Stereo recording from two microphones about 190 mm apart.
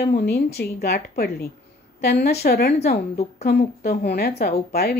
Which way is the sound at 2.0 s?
60° left (ahead or behind).